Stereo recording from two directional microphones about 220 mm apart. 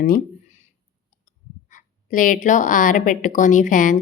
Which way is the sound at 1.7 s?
35° left (ahead or behind).